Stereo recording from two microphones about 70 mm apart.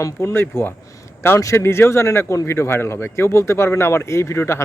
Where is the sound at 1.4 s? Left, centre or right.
Left.